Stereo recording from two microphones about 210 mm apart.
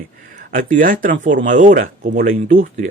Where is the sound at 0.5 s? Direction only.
40° right (ahead or behind).